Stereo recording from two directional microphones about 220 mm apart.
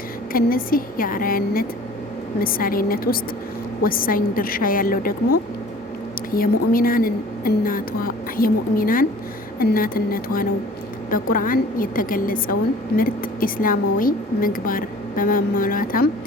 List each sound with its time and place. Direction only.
0.3 s a woman's voice: 40° left (ahead or behind)